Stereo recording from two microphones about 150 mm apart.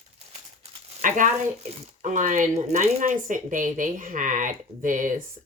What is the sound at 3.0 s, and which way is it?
Speech, 60° right (ahead or behind).